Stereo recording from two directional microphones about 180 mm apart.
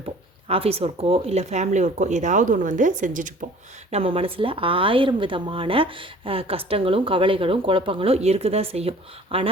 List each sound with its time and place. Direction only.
0.0 s speech: 35° right (ahead or behind)
3.9 s speech: 30° right (ahead or behind)